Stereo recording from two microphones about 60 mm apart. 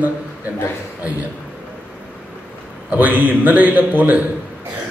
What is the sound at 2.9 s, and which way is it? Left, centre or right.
A man's voice, right.